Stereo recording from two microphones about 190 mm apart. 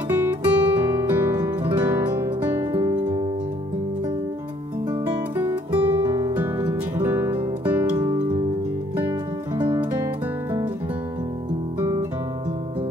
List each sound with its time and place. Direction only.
0.1 s music: 10° right (ahead or behind)
5.4 s music: 10° right (ahead or behind)
6.0 s music: 20° right (ahead or behind)
8.0 s music: 20° right (ahead or behind)